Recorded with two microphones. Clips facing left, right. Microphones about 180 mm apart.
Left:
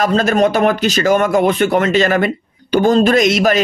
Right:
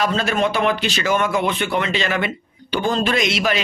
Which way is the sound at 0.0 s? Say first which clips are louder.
Left 6 dB; 45° left (ahead or behind).